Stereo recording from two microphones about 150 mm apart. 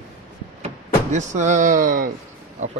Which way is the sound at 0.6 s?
50° right (ahead or behind).